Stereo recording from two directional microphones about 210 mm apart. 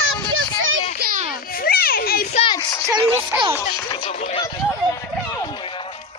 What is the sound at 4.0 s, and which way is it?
Speech, 35° left (ahead or behind).